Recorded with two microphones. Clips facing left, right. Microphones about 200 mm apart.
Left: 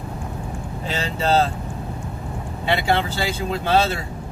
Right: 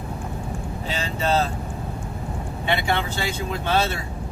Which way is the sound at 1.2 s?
30° left (ahead or behind).